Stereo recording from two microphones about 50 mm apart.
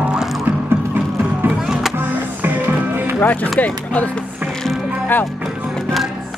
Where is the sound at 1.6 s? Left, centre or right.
Centre.